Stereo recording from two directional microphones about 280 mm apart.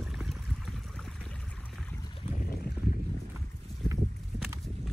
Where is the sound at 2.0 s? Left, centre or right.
Centre.